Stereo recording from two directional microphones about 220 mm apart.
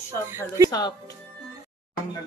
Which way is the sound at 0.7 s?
15° left (ahead or behind).